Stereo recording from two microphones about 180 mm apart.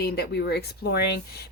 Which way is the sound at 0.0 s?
60° left (ahead or behind).